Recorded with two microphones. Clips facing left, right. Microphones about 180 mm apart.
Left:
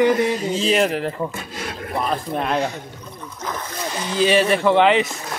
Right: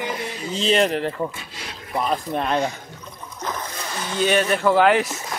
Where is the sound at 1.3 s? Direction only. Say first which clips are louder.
Left 7 dB; 50° left (ahead or behind).